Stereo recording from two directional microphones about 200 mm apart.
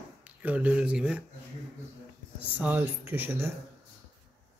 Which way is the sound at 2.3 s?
5° right (ahead or behind).